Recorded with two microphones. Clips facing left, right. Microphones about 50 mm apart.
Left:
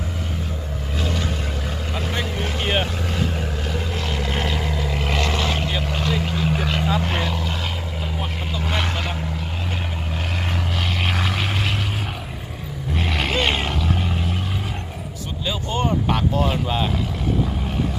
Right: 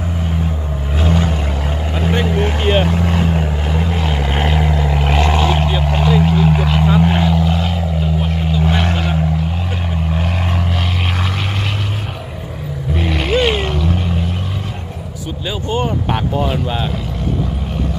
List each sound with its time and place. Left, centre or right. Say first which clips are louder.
0.9 s vehicle: right 8 dB; right
5.6 s vehicle: right 7 dB; centre
10.2 s vehicle: right 6 dB; centre
12.9 s vehicle: right 6 dB; centre
15.6 s vehicle: right 3 dB; right
16.5 s vehicle: right 3 dB; centre